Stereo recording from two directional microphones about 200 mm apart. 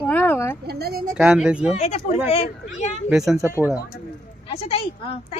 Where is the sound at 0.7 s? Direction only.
50° right (ahead or behind).